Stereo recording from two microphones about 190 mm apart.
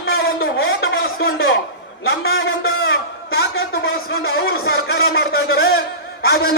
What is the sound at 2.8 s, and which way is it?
A man's voice, 60° left (ahead or behind).